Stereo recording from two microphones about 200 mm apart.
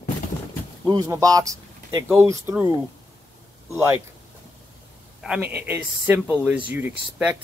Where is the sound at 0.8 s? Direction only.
15° right (ahead or behind).